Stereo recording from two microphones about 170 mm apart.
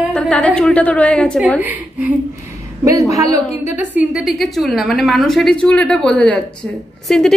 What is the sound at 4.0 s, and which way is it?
A woman's voice, 5° right (ahead or behind).